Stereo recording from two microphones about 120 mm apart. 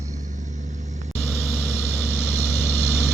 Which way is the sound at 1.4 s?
20° left (ahead or behind).